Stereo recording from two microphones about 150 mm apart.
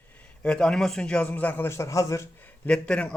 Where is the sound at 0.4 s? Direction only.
5° left (ahead or behind).